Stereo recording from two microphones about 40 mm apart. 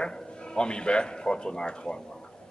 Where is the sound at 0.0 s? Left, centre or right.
Left.